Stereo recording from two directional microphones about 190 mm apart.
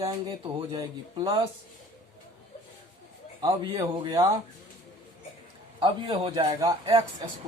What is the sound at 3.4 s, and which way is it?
Speech, 20° right (ahead or behind).